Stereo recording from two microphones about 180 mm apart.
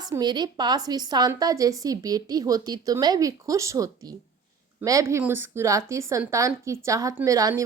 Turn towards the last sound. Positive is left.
turn(degrees=-20)  # may be behind; listen again after turning